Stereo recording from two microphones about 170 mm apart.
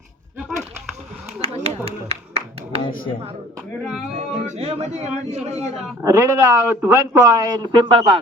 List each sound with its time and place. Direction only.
1.4 s a sound: 35° right (ahead or behind)
4.1 s speech: 35° right (ahead or behind)
6.0 s speech: 15° right (ahead or behind)